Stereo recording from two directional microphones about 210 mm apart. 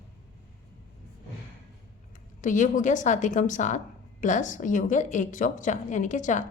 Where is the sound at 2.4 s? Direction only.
35° left (ahead or behind).